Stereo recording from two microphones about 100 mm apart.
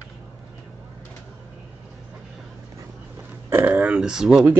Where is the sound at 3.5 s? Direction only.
20° right (ahead or behind).